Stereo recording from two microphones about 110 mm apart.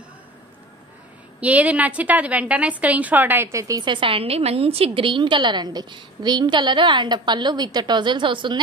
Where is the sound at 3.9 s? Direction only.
55° right (ahead or behind).